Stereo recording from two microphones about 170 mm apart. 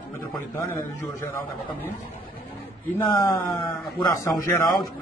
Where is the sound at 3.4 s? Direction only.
10° left (ahead or behind).